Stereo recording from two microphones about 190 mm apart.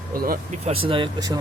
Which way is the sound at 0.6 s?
30° right (ahead or behind).